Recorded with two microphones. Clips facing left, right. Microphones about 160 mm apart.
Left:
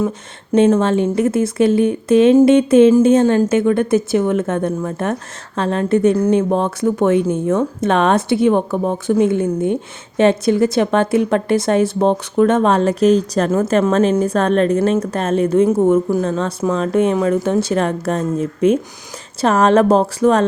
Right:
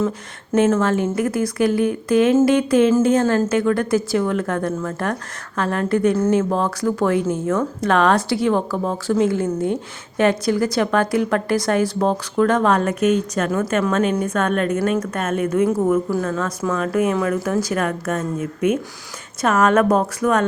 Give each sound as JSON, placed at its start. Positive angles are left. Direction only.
{"t": 0.5, "sound": "a woman's voice", "side_deg": 20}